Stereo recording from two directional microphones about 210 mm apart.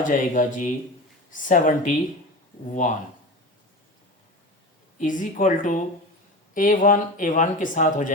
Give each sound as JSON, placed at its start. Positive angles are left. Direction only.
{"t": 0.0, "sound": "speech", "side_deg": 40}
{"t": 4.9, "sound": "speech", "side_deg": 40}